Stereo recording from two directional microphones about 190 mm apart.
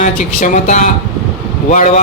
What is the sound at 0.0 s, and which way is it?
A man's voice, 40° left (ahead or behind).